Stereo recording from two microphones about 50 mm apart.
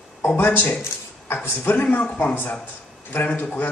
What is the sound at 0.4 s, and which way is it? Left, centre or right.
A man's voice, left.